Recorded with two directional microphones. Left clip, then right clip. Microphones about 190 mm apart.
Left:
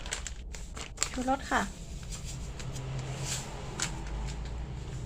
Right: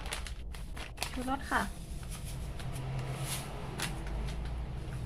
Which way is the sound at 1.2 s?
35° left (ahead or behind).